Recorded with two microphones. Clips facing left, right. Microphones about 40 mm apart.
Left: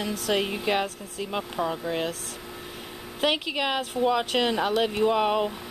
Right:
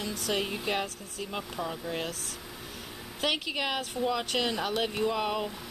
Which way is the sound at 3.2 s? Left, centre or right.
Left.